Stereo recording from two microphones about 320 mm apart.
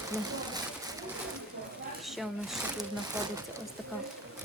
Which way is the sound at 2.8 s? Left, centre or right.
Centre.